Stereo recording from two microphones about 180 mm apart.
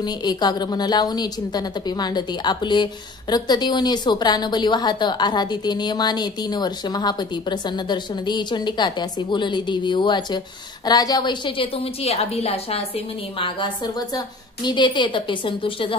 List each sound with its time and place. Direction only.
0.0 s a woman's voice: 25° left (ahead or behind)